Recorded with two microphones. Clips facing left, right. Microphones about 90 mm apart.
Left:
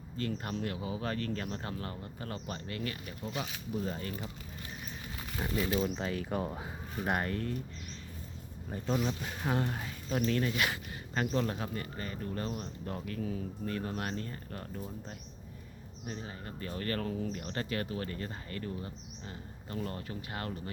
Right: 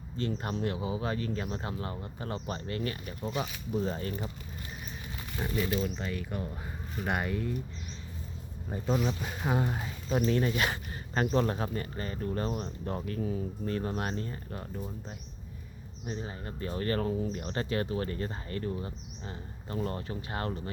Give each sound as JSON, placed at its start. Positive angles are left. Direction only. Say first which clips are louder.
{"t": 0.2, "sound": "speech", "louder": "right 3 dB", "side_deg": -25}
{"t": 5.4, "sound": "speech", "louder": "right 1 dB", "side_deg": 5}
{"t": 5.8, "sound": "speech", "louder": "left 1 dB", "side_deg": 25}
{"t": 7.0, "sound": "speech", "louder": "right 1 dB", "side_deg": 0}
{"t": 9.0, "sound": "speech", "louder": "right 2 dB", "side_deg": -10}
{"t": 10.6, "sound": "speech", "louder": "right 2 dB", "side_deg": -35}
{"t": 14.5, "sound": "speech", "louder": "right 2 dB", "side_deg": -5}
{"t": 16.0, "sound": "speech", "louder": "right 4 dB", "side_deg": -30}